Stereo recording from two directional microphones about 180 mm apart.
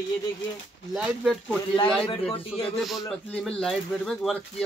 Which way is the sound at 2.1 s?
30° left (ahead or behind).